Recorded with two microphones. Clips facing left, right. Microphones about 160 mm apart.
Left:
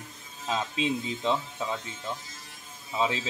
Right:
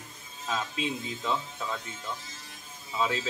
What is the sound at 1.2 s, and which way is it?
Speech, 20° left (ahead or behind).